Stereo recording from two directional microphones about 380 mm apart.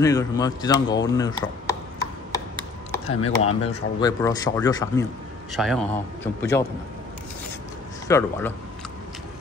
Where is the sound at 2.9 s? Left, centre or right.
Centre.